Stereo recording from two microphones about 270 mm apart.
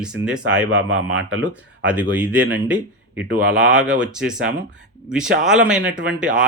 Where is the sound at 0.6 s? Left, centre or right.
Right.